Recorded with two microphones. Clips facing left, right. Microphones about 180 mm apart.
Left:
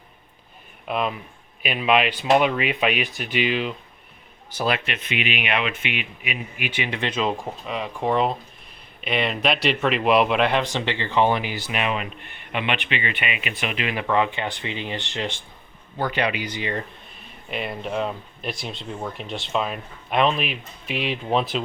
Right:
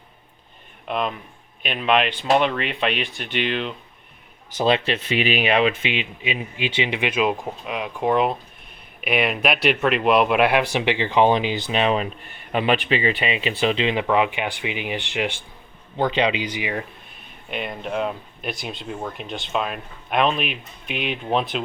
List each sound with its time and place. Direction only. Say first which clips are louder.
0.9 s speech: even; 5° left (ahead or behind)
4.5 s speech: right 5 dB; 25° right (ahead or behind)
11.7 s speech: right 5 dB; 30° right (ahead or behind); by 16.8 s 10° right (ahead or behind)
17.5 s speech: even; centre (ahead or behind)